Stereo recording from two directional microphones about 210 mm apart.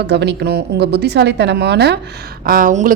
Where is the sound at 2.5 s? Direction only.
40° right (ahead or behind).